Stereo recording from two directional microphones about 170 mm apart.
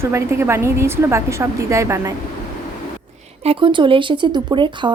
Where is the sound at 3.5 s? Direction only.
30° right (ahead or behind).